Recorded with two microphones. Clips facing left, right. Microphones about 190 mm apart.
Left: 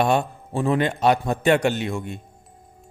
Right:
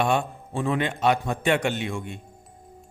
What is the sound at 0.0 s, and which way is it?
A man's voice, 40° left (ahead or behind).